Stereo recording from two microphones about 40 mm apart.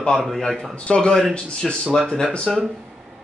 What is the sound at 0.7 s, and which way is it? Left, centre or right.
Speech, left.